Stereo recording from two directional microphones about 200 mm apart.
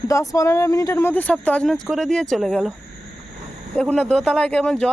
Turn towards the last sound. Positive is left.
turn(degrees=5)  # may be behind; listen again after turning